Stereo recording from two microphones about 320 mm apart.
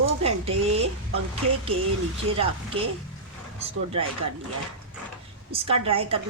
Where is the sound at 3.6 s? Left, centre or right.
Centre.